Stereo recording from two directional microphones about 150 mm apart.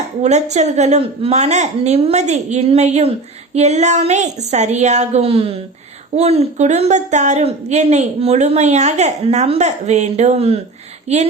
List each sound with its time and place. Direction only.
0.2 s a woman's voice: 50° right (ahead or behind)